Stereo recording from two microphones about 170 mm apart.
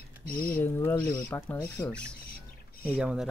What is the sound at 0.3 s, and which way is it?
Speech, 55° left (ahead or behind).